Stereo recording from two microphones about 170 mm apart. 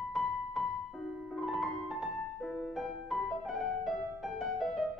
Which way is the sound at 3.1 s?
Centre (ahead or behind).